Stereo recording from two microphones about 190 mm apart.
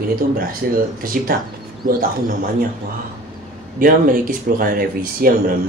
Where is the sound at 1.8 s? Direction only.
50° right (ahead or behind).